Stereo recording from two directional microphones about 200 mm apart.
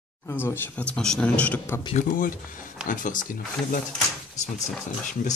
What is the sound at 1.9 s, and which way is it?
Speech, 40° left (ahead or behind).